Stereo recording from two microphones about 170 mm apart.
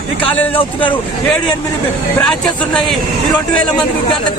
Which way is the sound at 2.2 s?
5° left (ahead or behind).